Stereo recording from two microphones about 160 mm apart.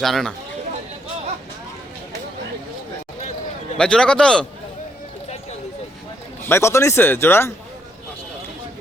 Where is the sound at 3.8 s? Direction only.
5° left (ahead or behind).